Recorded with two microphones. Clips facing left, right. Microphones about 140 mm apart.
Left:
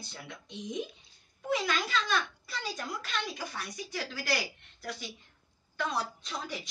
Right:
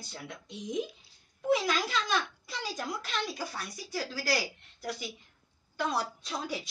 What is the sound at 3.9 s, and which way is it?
Speech, 35° right (ahead or behind).